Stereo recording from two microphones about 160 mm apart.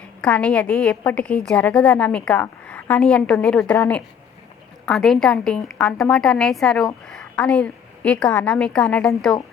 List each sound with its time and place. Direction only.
0.2 s a woman's voice: 5° left (ahead or behind)